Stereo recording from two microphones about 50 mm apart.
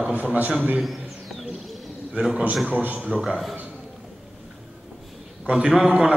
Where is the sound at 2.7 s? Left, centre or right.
Right.